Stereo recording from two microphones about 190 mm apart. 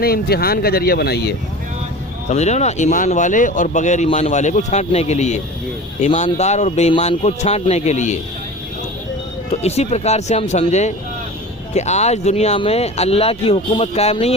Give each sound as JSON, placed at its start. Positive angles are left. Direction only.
{"t": 0.0, "sound": "speech", "side_deg": 55}
{"t": 2.3, "sound": "speech", "side_deg": 35}
{"t": 9.5, "sound": "speech", "side_deg": 35}